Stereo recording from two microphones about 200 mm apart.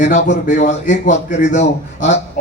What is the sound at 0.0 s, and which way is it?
A man's voice, 40° left (ahead or behind).